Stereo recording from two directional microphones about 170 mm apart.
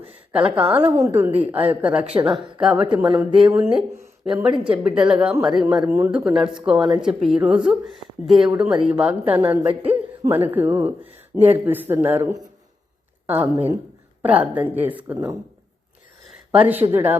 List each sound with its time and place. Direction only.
0.3 s a woman's voice: 5° right (ahead or behind)
12.2 s a man's voice: 25° right (ahead or behind)
13.2 s a woman's voice: 10° right (ahead or behind)
16.6 s speech: 10° right (ahead or behind)